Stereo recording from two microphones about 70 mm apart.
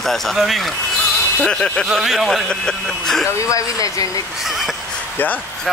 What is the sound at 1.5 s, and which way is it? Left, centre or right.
Speech, centre.